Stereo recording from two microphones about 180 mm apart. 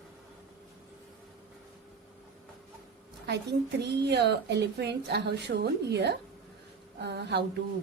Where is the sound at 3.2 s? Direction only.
65° right (ahead or behind).